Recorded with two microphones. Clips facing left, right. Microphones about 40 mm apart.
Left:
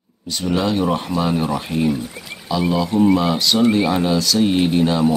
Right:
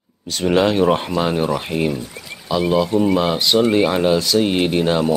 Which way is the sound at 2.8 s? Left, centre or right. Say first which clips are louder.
Left 2 dB; centre.